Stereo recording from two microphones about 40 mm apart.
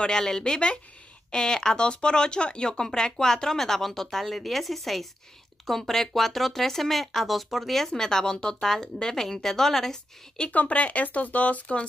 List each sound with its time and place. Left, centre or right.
0.0 s a woman's voice: centre
7.9 s a woman's voice: centre
10.5 s speech: left